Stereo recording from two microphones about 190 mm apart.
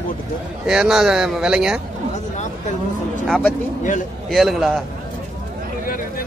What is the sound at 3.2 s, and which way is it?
A man's voice, centre (ahead or behind).